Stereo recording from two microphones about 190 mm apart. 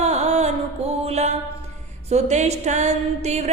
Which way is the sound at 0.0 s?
35° right (ahead or behind).